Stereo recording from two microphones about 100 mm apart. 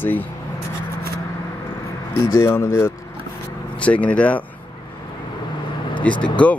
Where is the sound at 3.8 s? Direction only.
15° left (ahead or behind).